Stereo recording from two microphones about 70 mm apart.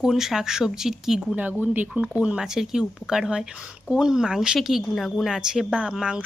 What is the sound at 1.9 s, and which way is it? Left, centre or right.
Speech, centre.